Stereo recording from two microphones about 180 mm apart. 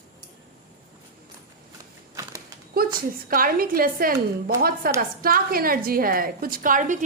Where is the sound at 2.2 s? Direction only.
20° right (ahead or behind).